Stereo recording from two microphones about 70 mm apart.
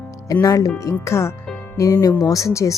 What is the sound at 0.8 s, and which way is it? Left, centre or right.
Speech, left.